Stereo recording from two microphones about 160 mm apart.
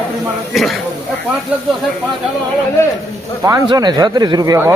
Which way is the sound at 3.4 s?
20° right (ahead or behind).